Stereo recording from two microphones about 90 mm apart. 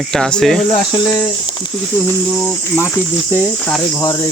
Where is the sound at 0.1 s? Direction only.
5° left (ahead or behind).